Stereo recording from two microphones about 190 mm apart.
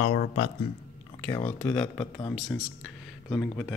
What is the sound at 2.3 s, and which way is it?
Speech, centre (ahead or behind).